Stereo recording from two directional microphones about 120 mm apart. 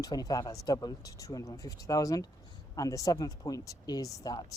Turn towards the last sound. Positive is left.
turn(degrees=30)  # may be behind; listen again after turning